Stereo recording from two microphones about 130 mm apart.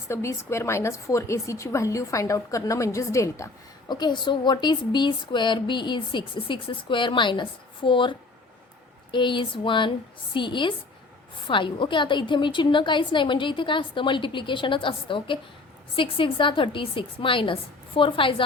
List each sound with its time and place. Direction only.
0.1 s a woman's voice: 20° left (ahead or behind); by 8.1 s 40° left (ahead or behind)
9.1 s a woman's voice: 35° left (ahead or behind)